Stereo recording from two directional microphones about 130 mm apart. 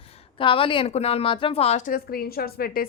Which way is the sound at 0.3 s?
45° left (ahead or behind).